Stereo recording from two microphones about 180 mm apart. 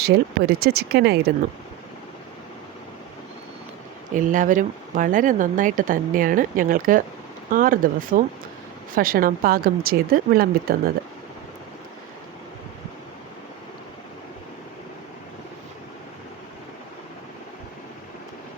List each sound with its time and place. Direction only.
0.0 s speech: 60° right (ahead or behind)
4.1 s speech: 45° right (ahead or behind)